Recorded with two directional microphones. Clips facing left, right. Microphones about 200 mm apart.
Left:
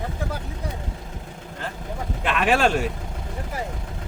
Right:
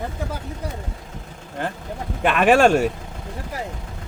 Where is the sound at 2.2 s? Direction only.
55° right (ahead or behind).